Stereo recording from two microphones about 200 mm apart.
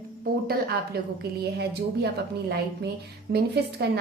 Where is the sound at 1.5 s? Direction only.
55° right (ahead or behind).